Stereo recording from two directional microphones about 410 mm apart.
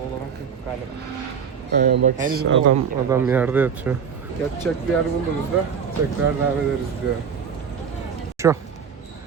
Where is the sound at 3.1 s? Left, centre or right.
Centre.